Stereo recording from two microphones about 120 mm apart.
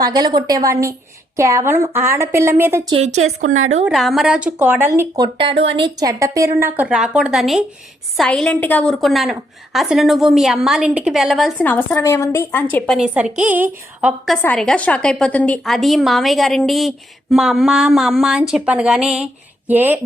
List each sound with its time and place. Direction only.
0.0 s a woman's voice: 35° right (ahead or behind)
2.9 s a woman's voice: 65° right (ahead or behind)
3.9 s a woman's voice: centre (ahead or behind); by 5.0 s 20° right (ahead or behind)
5.1 s speech: 40° right (ahead or behind)
6.0 s a woman's voice: 30° right (ahead or behind)
6.6 s a woman's voice: 15° right (ahead or behind)
11.5 s a woman's voice: 15° left (ahead or behind)
12.8 s a woman's voice: centre (ahead or behind)
13.1 s a woman's voice: 10° right (ahead or behind)
14.4 s a woman's voice: 5° left (ahead or behind)
15.7 s a woman's voice: centre (ahead or behind); by 20.0 s 15° right (ahead or behind)